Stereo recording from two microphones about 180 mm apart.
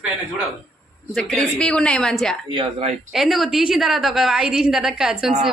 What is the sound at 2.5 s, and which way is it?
Speech, 35° right (ahead or behind).